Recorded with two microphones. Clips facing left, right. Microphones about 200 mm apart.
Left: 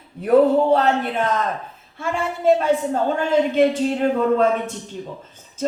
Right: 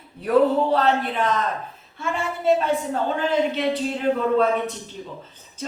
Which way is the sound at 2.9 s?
50° left (ahead or behind).